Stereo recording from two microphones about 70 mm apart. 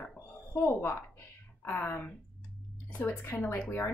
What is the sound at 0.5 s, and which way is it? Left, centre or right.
Speech, left.